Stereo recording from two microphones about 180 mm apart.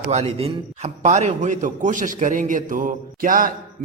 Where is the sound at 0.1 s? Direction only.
40° right (ahead or behind).